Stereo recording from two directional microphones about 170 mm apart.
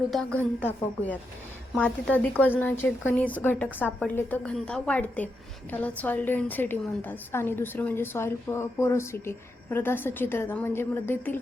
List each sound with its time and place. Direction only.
0.1 s a woman's voice: 5° left (ahead or behind)